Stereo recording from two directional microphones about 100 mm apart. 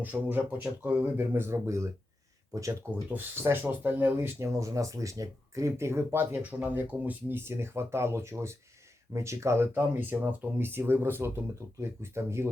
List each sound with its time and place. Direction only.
0.0 s speech: 20° right (ahead or behind)
3.1 s speech: 20° right (ahead or behind)
4.4 s speech: 30° right (ahead or behind)